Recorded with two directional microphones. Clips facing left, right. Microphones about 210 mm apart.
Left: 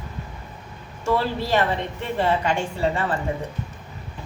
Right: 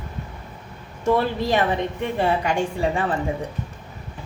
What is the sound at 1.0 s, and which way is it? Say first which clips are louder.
A woman's voice: right 3 dB; 15° right (ahead or behind).